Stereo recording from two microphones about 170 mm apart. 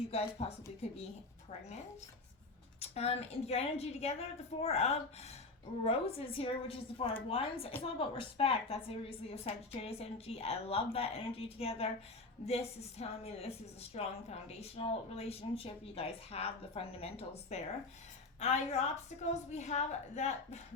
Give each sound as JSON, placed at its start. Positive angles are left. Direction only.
{"t": 0.1, "sound": "a woman's voice", "side_deg": 35}
{"t": 2.8, "sound": "a woman's voice", "side_deg": 35}